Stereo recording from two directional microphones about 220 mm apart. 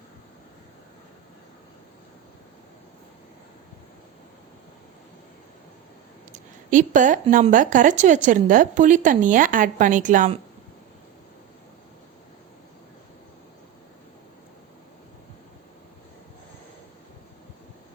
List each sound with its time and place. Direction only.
6.3 s a woman's voice: 35° right (ahead or behind)